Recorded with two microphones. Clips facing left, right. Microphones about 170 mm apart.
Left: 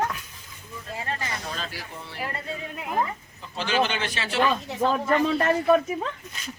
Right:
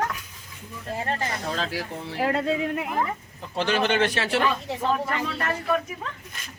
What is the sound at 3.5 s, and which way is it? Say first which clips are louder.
Speech: right 2 dB; 60° right (ahead or behind).